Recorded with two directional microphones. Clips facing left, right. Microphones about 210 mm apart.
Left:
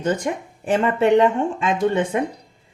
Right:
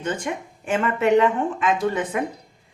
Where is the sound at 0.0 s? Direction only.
40° left (ahead or behind).